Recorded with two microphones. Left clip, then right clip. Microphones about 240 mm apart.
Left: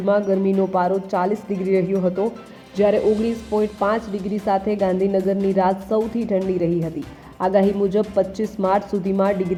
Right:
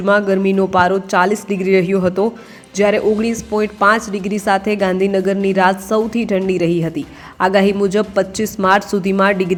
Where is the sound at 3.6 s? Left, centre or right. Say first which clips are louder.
Right 9 dB; centre.